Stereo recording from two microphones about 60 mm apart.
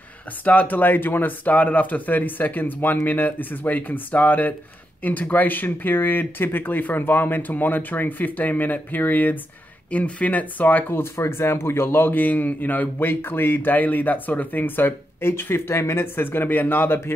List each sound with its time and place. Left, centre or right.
0.5 s speech: left
9.8 s speech: left